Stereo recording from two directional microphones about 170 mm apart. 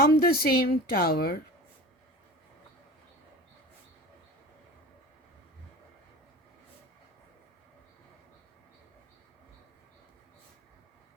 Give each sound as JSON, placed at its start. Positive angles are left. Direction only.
{"t": 0.0, "sound": "speech", "side_deg": 60}